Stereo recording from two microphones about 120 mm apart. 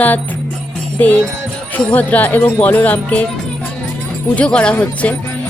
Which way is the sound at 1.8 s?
15° left (ahead or behind).